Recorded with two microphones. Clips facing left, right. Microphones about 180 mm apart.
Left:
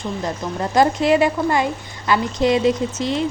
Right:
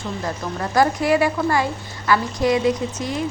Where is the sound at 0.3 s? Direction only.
20° left (ahead or behind).